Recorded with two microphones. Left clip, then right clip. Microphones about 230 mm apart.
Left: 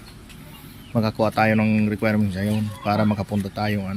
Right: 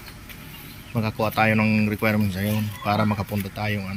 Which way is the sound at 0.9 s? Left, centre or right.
Centre.